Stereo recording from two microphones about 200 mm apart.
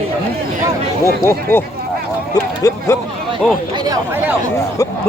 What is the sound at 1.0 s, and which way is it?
A man's voice, 15° left (ahead or behind).